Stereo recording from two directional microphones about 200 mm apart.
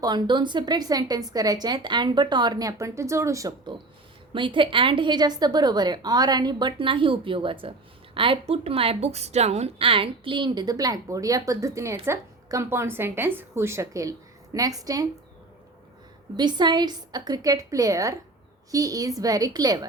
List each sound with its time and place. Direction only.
0.0 s a woman's voice: 20° right (ahead or behind)
16.4 s a woman's voice: 20° right (ahead or behind)